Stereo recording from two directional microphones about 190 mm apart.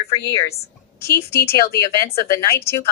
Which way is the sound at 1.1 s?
55° left (ahead or behind).